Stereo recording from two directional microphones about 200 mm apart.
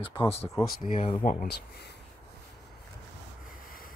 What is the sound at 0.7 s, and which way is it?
Speech, 40° left (ahead or behind).